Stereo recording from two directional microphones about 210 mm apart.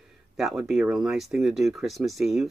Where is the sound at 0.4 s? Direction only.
Centre (ahead or behind).